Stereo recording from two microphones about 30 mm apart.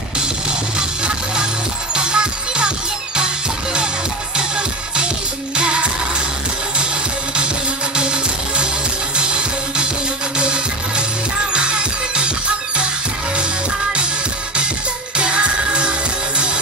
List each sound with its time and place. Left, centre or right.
0.7 s music: right
4.4 s music: right
7.9 s music: right
15.1 s music: right